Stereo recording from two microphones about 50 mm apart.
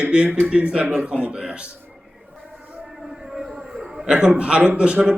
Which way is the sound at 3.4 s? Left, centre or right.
Centre.